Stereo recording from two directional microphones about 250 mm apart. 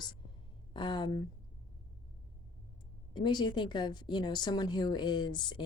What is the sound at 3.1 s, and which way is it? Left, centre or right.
A woman's voice, centre.